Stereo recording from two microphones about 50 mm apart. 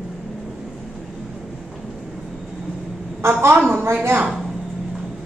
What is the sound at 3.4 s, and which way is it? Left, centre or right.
Speech, right.